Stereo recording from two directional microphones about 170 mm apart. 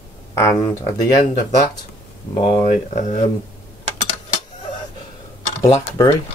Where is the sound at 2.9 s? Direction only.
45° left (ahead or behind).